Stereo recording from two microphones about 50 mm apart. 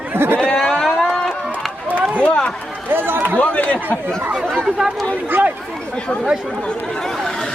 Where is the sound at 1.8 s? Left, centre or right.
Right.